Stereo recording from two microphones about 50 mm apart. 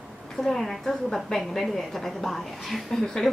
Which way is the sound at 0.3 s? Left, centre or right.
Centre.